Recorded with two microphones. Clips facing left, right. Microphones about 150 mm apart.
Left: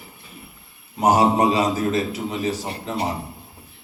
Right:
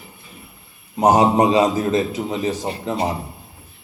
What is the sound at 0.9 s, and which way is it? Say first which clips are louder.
A man's voice: right 3 dB; 20° right (ahead or behind).